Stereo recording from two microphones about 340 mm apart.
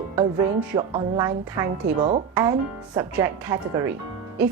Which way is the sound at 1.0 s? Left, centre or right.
Centre.